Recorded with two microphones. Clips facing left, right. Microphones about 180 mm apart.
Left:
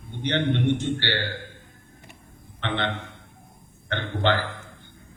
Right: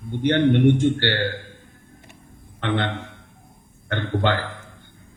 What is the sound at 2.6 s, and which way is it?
Speech, 50° right (ahead or behind).